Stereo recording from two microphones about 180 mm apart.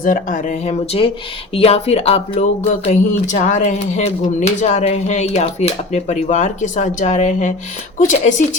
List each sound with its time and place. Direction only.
0.0 s speech: 45° left (ahead or behind)